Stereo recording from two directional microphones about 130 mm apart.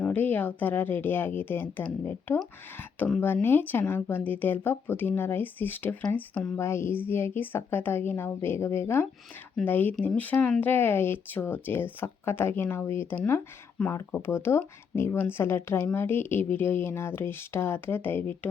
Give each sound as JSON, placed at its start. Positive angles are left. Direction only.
{"t": 0.0, "sound": "a woman's voice", "side_deg": 10}